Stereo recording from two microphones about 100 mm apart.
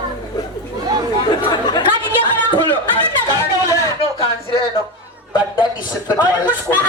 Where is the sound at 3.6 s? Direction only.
35° left (ahead or behind).